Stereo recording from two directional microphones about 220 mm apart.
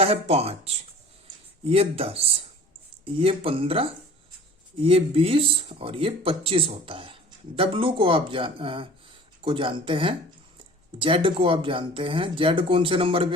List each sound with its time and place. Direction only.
0.0 s speech: 30° right (ahead or behind)